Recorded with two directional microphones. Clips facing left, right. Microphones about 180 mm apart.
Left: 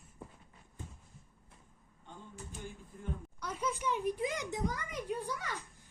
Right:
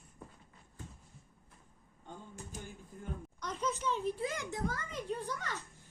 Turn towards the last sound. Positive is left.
turn(degrees=10)  # may be behind; listen again after turning